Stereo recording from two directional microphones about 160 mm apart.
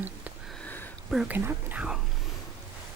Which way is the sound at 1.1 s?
Centre (ahead or behind).